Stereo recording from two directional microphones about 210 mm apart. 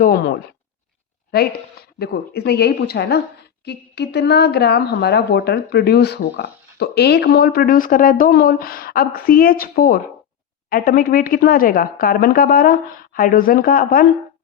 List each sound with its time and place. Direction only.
0.0 s a woman's voice: 45° left (ahead or behind)
2.0 s a woman's voice: 50° left (ahead or behind)